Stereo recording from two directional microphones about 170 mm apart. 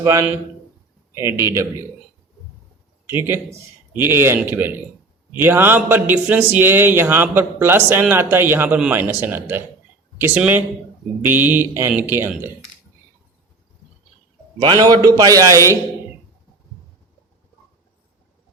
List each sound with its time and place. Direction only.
0.0 s a man's voice: 15° right (ahead or behind)
3.1 s a man's voice: 15° right (ahead or behind)
14.6 s a man's voice: 25° right (ahead or behind)